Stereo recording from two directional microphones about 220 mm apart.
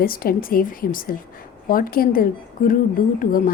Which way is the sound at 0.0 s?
40° left (ahead or behind).